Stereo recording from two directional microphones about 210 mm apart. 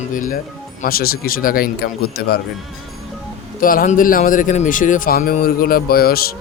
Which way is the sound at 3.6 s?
40° left (ahead or behind).